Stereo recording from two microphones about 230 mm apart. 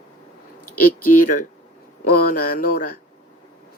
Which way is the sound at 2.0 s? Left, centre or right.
Left.